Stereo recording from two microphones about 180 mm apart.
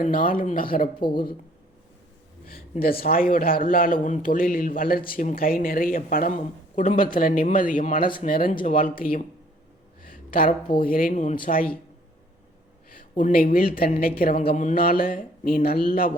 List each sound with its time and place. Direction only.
0.0 s speech: 50° left (ahead or behind)
0.9 s speech: 25° left (ahead or behind)
2.5 s speech: 55° left (ahead or behind)
10.1 s a sound: 50° left (ahead or behind)
10.8 s speech: 50° left (ahead or behind)
12.9 s a woman's voice: 50° left (ahead or behind)
14.4 s speech: 45° left (ahead or behind)